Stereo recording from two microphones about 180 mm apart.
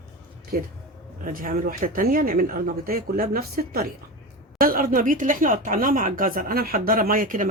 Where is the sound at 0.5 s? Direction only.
55° right (ahead or behind).